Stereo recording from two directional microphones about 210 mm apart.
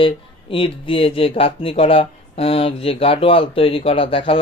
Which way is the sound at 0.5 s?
25° left (ahead or behind).